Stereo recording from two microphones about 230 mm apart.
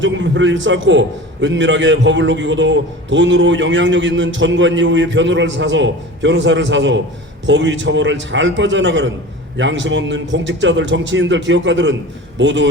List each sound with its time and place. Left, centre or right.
0.0 s a man's voice: right